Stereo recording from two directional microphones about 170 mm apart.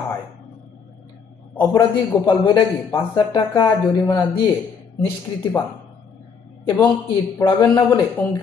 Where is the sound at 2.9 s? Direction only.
25° left (ahead or behind).